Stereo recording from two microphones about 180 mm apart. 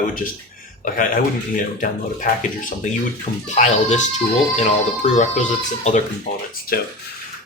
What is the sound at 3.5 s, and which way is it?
Speech, 40° left (ahead or behind).